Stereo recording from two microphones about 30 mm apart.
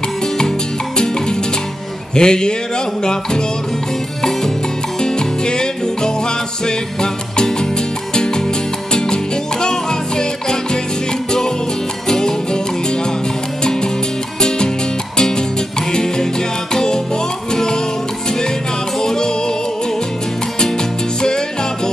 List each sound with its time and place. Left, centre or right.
0.9 s music: left
5.0 s music: left
12.1 s music: left
15.1 s music: left
18.9 s music: left